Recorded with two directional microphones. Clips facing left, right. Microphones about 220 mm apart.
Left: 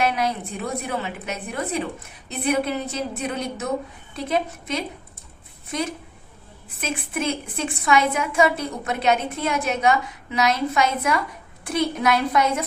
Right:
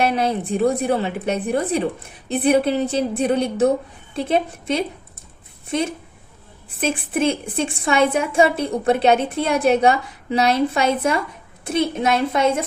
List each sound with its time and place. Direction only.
0.0 s a woman's voice: 30° right (ahead or behind)
6.8 s a woman's voice: 30° right (ahead or behind)